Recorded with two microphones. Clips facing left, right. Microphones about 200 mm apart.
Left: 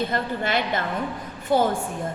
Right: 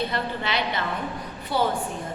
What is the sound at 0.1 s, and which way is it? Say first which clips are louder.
A woman's voice: left 3 dB; 50° left (ahead or behind).